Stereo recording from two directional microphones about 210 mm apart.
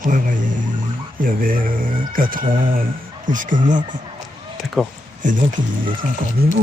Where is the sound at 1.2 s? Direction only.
40° right (ahead or behind).